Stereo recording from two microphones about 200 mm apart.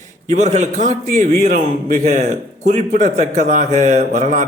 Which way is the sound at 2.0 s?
35° right (ahead or behind).